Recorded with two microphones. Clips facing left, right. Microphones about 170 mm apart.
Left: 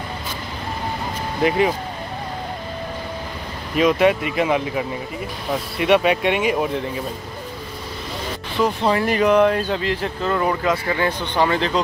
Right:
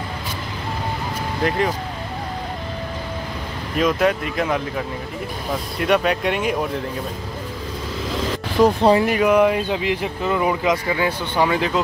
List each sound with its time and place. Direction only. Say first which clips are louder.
3.7 s speech: left 2 dB; centre (ahead or behind)
8.5 s speech: right 5 dB; 40° right (ahead or behind)
9.0 s speech: even; 10° right (ahead or behind)